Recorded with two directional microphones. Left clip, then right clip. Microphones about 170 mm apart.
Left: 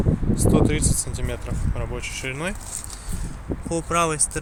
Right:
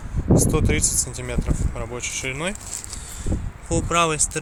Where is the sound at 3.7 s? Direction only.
Centre (ahead or behind).